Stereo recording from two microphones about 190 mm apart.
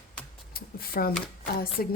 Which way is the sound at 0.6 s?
50° left (ahead or behind).